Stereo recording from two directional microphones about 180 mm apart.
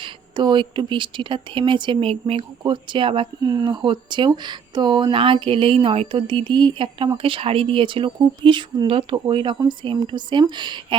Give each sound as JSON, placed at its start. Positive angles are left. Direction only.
{"t": 0.0, "sound": "speech", "side_deg": -25}